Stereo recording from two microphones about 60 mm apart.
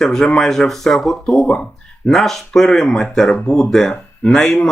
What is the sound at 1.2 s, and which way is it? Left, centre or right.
Speech, centre.